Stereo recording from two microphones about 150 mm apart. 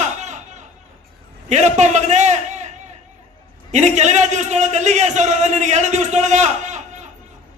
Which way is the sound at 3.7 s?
50° right (ahead or behind).